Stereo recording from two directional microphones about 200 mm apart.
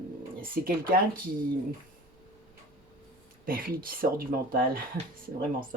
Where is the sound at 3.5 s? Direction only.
45° right (ahead or behind).